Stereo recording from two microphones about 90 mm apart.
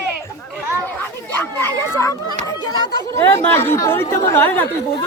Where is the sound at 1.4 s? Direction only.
25° left (ahead or behind).